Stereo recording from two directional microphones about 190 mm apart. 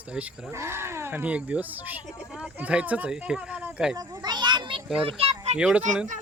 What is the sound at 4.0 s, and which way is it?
Children playing, 20° right (ahead or behind).